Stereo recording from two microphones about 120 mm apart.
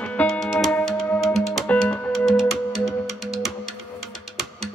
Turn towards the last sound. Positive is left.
turn(degrees=0)  # may be behind; listen again after turning